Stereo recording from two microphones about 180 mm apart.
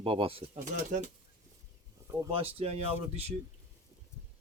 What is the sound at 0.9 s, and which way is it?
Speech, 45° right (ahead or behind).